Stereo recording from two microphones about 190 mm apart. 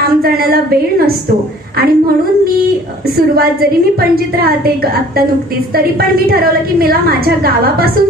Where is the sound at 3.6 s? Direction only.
55° right (ahead or behind).